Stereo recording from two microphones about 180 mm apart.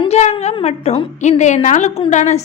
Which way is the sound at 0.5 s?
35° left (ahead or behind).